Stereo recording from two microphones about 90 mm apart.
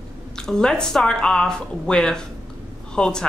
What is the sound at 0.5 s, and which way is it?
A woman's voice, 5° left (ahead or behind).